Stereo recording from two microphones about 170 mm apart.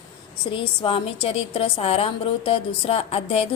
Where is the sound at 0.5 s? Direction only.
30° left (ahead or behind).